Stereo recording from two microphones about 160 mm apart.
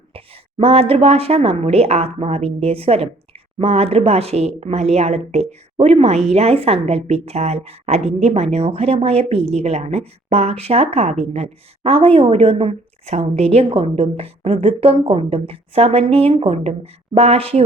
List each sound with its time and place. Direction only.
0.6 s speech: 40° right (ahead or behind)